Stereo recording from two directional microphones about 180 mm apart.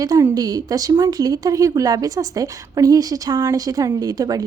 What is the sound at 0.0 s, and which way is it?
Speech, 20° right (ahead or behind).